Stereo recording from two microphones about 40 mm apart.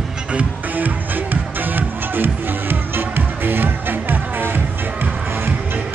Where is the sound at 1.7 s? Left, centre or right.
Right.